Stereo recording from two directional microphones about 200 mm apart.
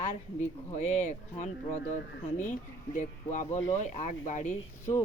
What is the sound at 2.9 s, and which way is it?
Speech, 40° left (ahead or behind).